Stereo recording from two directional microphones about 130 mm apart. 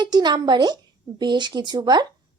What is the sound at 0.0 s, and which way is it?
Speech, 35° right (ahead or behind).